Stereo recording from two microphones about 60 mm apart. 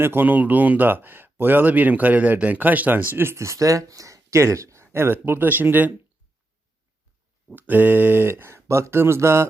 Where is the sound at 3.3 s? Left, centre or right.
Right.